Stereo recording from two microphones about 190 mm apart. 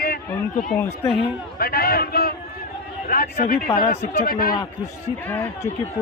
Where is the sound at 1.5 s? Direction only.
55° left (ahead or behind).